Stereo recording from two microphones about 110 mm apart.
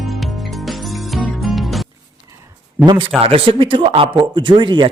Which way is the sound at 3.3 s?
55° right (ahead or behind).